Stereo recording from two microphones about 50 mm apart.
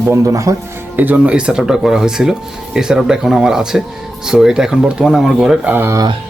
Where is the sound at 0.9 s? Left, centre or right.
Right.